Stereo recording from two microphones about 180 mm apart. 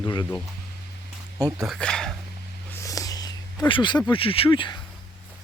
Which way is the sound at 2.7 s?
20° left (ahead or behind).